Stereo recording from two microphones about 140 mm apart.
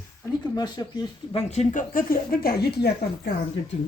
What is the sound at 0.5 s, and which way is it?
Speech, 30° left (ahead or behind).